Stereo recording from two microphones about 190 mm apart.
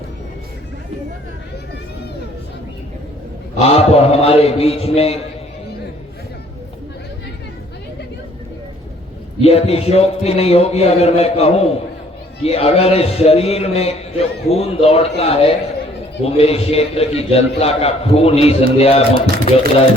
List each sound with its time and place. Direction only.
3.6 s a man's voice: 35° left (ahead or behind)
9.4 s a man's voice: 30° left (ahead or behind)